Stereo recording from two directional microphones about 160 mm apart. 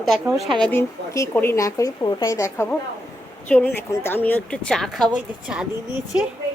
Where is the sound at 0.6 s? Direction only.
15° left (ahead or behind); by 5.6 s 5° right (ahead or behind).